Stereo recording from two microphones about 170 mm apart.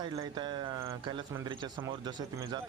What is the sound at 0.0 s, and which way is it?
Speech, 25° right (ahead or behind).